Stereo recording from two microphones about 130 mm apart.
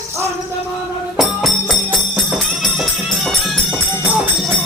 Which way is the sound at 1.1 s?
Centre (ahead or behind).